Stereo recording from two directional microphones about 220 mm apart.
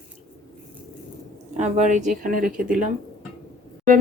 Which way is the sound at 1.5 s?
30° right (ahead or behind).